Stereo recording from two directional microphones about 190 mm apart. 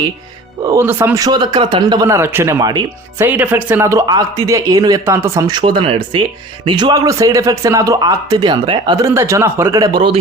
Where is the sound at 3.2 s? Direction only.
10° right (ahead or behind).